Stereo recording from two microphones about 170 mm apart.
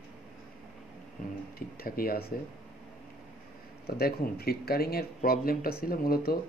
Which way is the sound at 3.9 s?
65° left (ahead or behind).